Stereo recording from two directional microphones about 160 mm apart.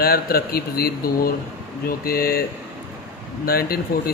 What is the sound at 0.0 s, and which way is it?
Speech, 70° left (ahead or behind).